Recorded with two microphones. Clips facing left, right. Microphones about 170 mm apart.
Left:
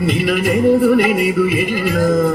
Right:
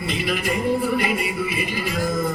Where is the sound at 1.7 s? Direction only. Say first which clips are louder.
Left 9 dB; 50° left (ahead or behind).